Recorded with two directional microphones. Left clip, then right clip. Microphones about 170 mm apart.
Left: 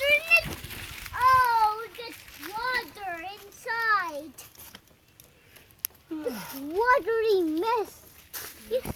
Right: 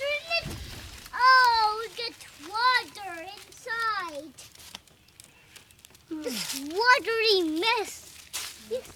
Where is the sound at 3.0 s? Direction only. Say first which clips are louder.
Left 3 dB; 45° left (ahead or behind).